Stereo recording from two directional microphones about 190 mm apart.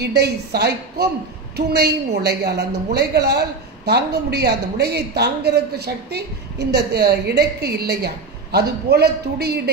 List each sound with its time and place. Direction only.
0.0 s a woman's voice: 60° right (ahead or behind)